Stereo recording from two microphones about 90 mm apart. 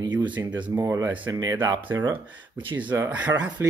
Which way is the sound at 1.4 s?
45° right (ahead or behind).